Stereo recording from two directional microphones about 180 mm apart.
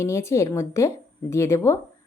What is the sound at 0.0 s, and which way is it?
Speech, 15° left (ahead or behind).